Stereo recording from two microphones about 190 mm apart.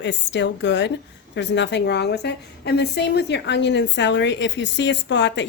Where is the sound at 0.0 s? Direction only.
70° left (ahead or behind).